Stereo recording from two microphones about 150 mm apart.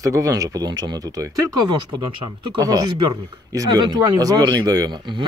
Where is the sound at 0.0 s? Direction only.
20° right (ahead or behind).